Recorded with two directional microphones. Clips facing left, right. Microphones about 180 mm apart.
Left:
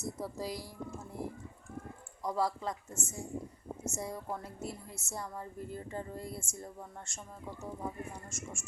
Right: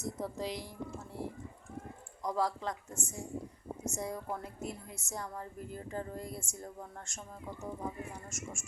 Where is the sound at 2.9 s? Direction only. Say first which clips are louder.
Even; 15° right (ahead or behind).